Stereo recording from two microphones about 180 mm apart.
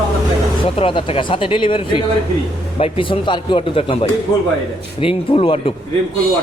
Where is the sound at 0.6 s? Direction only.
30° left (ahead or behind).